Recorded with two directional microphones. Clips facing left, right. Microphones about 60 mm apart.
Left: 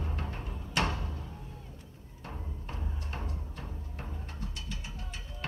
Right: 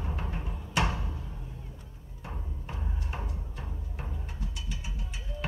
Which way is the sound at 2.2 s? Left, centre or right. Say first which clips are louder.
Right 1 dB; centre.